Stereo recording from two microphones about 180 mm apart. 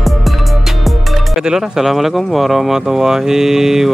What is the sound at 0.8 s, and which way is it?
Speech, centre (ahead or behind).